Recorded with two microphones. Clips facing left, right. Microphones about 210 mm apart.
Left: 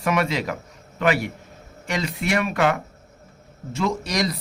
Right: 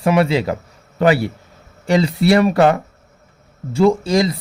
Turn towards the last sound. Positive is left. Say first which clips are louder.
# right 10 dB
turn(degrees=-30)  # may be behind; listen again after turning